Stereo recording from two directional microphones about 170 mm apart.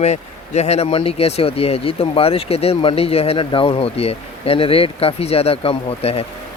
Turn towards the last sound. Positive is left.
turn(degrees=35)  # may be behind; listen again after turning